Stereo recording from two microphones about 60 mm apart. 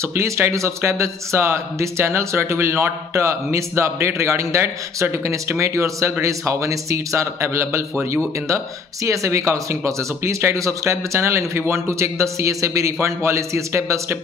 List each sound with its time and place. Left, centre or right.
0.1 s a man's voice: right